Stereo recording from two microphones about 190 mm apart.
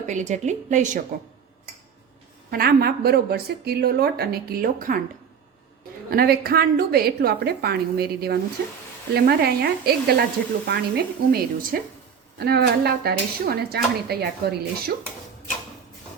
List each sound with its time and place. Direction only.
0.0 s a woman's voice: 40° right (ahead or behind)
2.5 s speech: 55° right (ahead or behind)
6.1 s speech: 55° right (ahead or behind)